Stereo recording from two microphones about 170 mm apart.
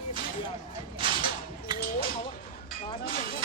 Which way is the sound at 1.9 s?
35° left (ahead or behind).